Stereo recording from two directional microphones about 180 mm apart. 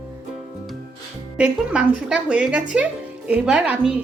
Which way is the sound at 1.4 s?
5° right (ahead or behind).